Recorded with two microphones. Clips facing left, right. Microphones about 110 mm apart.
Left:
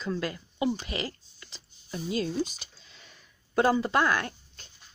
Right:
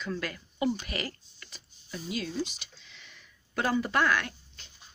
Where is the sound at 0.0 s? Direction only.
25° left (ahead or behind).